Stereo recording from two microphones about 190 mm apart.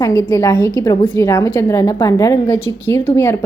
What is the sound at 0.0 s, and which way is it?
A woman's voice, 15° left (ahead or behind).